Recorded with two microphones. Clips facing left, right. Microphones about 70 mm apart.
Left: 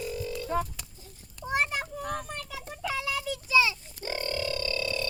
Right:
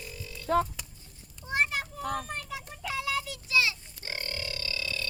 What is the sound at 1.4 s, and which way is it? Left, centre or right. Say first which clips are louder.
Children playing: left 7 dB; left.